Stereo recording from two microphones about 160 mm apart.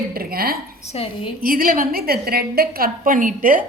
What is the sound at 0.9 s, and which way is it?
Speech, 35° left (ahead or behind).